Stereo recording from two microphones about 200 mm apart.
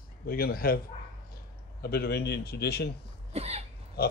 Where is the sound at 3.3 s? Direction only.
30° right (ahead or behind).